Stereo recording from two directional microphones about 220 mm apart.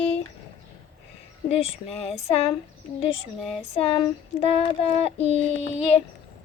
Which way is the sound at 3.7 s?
25° left (ahead or behind).